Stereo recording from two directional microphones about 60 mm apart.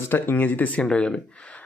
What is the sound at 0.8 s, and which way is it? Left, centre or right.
Speech, centre.